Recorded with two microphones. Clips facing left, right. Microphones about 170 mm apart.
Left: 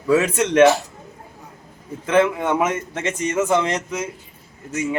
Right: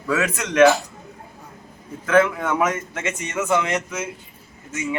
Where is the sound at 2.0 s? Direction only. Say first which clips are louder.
Left 1 dB; 25° left (ahead or behind).